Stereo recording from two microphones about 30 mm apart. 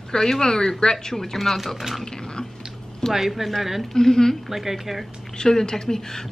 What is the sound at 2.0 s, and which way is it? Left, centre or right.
Bathtub, left.